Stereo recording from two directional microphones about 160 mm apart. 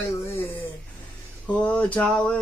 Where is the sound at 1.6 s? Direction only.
10° left (ahead or behind).